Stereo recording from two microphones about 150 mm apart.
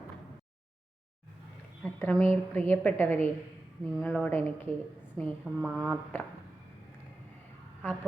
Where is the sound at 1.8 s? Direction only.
10° left (ahead or behind).